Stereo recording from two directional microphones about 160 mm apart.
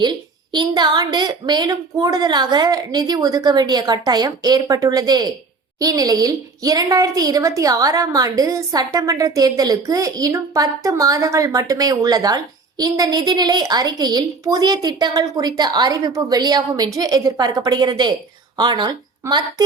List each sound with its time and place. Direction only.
0.0 s a woman's voice: 25° right (ahead or behind)